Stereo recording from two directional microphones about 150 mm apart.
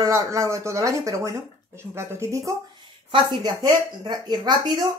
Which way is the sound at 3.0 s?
35° right (ahead or behind).